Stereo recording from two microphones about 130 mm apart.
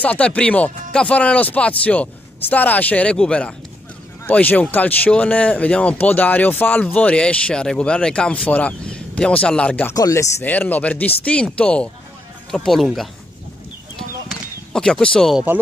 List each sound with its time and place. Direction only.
0.0 s speech: 10° left (ahead or behind)
9.8 s speech: 25° left (ahead or behind)
10.4 s speech: 15° left (ahead or behind)
14.7 s speech: 5° left (ahead or behind)